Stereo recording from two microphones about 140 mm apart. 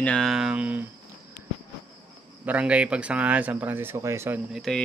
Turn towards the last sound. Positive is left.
turn(degrees=0)  # may be behind; listen again after turning